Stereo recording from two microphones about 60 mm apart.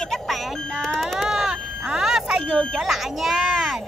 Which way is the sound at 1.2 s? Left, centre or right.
Centre.